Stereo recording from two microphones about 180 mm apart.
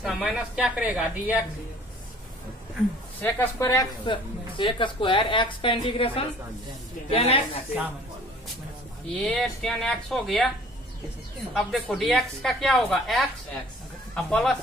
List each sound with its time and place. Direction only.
0.0 s a woman's voice: centre (ahead or behind)
3.2 s a woman's voice: 10° left (ahead or behind); by 7.4 s 35° left (ahead or behind)
9.1 s a woman's voice: 5° left (ahead or behind)
11.5 s a woman's voice: centre (ahead or behind)